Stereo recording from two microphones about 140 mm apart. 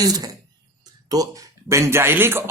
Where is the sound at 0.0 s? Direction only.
25° right (ahead or behind).